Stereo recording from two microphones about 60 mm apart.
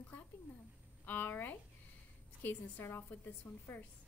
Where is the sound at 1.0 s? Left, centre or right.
Left.